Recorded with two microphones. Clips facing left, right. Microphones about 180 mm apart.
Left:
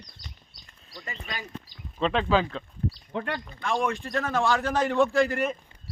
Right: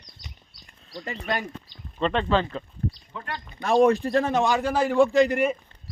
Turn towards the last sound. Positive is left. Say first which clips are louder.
# right 4 dB
turn(degrees=-15)  # may be behind; listen again after turning